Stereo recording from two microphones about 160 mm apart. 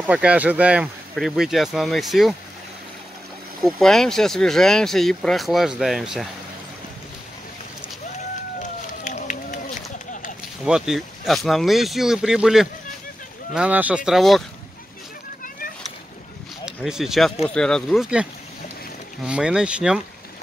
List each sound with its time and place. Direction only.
0.0 s speech: 10° right (ahead or behind)
3.6 s speech: centre (ahead or behind)
8.5 s a sound: 50° left (ahead or behind)
10.6 s speech: 5° right (ahead or behind)
16.6 s speech: 5° right (ahead or behind)